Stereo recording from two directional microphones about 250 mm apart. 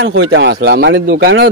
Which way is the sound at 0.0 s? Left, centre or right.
Right.